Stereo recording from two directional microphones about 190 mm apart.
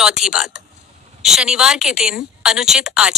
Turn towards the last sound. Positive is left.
turn(degrees=-5)  # may be behind; listen again after turning